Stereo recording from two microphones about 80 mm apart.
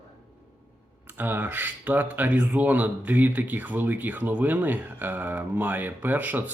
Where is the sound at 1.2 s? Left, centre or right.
Right.